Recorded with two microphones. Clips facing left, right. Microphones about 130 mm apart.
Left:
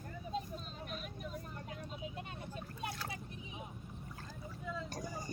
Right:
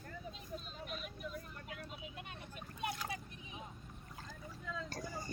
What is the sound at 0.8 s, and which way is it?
Vehicle, 40° left (ahead or behind).